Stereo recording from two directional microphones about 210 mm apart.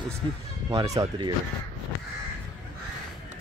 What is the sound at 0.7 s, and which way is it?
Speech, 15° right (ahead or behind).